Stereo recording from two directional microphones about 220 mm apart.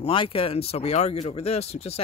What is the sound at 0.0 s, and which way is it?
Speech, 25° left (ahead or behind).